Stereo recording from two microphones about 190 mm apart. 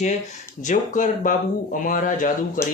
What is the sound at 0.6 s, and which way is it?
Speech, 40° left (ahead or behind).